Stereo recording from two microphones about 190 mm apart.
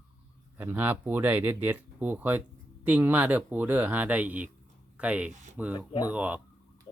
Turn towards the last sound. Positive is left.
turn(degrees=-10)  # may be behind; listen again after turning